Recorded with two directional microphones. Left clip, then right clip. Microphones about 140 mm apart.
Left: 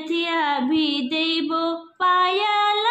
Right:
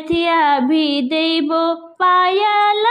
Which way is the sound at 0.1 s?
45° right (ahead or behind).